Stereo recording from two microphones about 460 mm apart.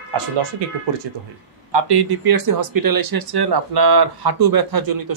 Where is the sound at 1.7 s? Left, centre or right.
Right.